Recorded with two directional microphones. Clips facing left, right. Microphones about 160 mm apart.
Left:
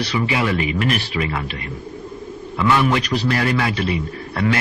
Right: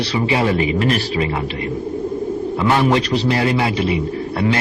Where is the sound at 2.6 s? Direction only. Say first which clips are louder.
Right 1 dB; 35° right (ahead or behind).